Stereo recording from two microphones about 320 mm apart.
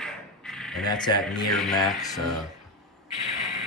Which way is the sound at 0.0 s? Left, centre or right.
Centre.